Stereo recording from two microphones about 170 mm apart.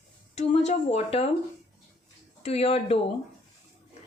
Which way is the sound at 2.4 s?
35° left (ahead or behind).